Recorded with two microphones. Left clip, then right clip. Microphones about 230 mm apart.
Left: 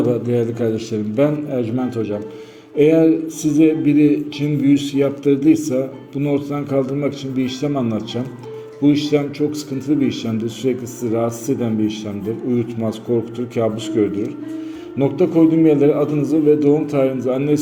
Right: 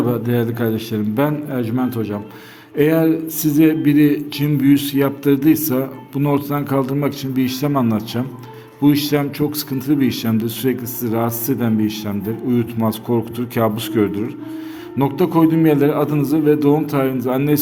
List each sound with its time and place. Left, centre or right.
0.1 s a man's voice: right